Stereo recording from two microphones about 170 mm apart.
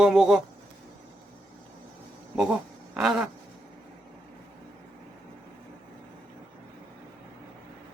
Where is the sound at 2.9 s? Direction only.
5° right (ahead or behind).